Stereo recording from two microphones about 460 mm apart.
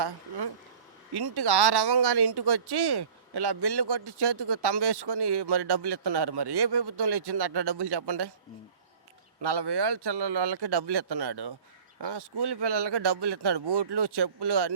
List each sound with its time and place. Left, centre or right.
0.0 s speech: right
9.4 s speech: right